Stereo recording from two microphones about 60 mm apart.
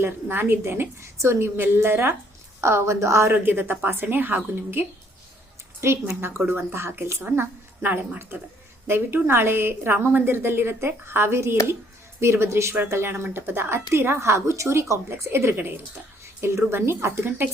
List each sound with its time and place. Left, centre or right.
0.0 s a woman's voice: right
3.3 s a woman's voice: right
15.3 s a woman's voice: right
16.2 s a woman's voice: right